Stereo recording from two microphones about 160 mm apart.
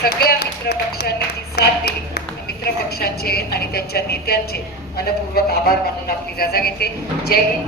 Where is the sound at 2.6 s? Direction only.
80° left.